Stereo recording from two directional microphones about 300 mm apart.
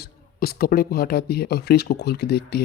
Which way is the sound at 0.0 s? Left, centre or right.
Left.